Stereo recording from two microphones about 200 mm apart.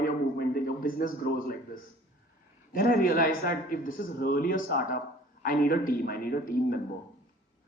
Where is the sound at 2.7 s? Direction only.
45° left (ahead or behind).